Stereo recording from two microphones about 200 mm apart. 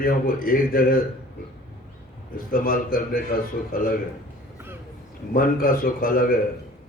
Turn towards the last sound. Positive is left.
turn(degrees=45)  # may be behind; listen again after turning